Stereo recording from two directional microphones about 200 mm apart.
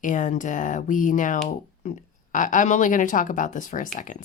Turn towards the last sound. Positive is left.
turn(degrees=40)  # may be behind; listen again after turning